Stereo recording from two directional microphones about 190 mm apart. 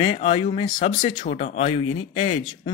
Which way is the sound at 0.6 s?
45° left (ahead or behind).